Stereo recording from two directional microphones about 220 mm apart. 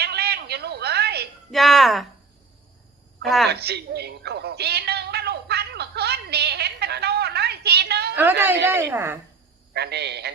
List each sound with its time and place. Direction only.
0.0 s a sound: 45° right (ahead or behind)
1.5 s a woman's voice: centre (ahead or behind)
3.2 s a woman's voice: centre (ahead or behind)
3.5 s music: 45° right (ahead or behind)
8.1 s a woman's voice: 10° right (ahead or behind)
9.7 s a man's voice: 50° right (ahead or behind)